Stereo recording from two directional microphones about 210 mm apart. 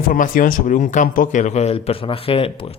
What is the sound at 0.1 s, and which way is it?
Speech, 40° left (ahead or behind).